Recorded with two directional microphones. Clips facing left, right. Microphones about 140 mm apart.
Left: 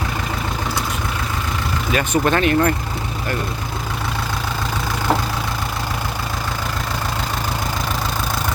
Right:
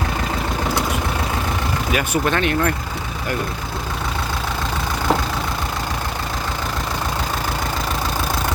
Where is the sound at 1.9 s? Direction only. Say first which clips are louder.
Left 3 dB; 10° right (ahead or behind).